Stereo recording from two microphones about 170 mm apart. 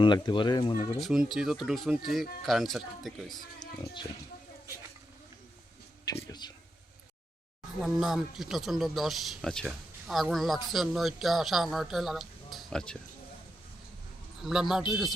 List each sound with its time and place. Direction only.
0.0 s speech: 25° left (ahead or behind)
0.7 s speech: 50° left (ahead or behind)
1.0 s speech: centre (ahead or behind)
3.6 s speech: 25° left (ahead or behind)
6.2 s a sound: 25° left (ahead or behind)
7.8 s speech: centre (ahead or behind)
14.4 s speech: centre (ahead or behind)